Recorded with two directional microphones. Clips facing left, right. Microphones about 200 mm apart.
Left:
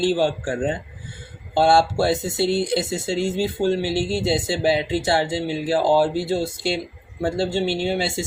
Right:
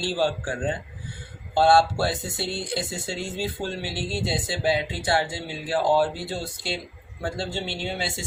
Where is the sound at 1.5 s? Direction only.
25° left (ahead or behind).